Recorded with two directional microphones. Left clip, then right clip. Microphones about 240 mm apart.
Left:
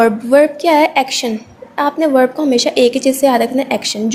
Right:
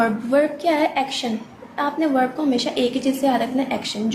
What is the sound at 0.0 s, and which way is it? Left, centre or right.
A woman's voice, left.